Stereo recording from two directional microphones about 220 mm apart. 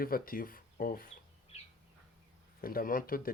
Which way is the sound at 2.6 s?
40° left (ahead or behind).